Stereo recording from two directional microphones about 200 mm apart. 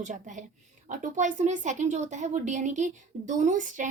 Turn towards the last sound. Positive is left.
turn(degrees=-40)  # may be behind; listen again after turning